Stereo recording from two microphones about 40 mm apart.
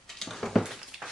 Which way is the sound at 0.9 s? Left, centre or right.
Centre.